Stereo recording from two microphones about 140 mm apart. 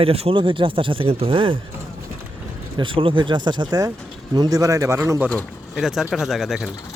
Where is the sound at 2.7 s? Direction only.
40° right (ahead or behind); by 5.3 s 15° right (ahead or behind).